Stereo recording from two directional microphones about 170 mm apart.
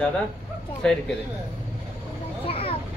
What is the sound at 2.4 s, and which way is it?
Vehicle, 35° left (ahead or behind).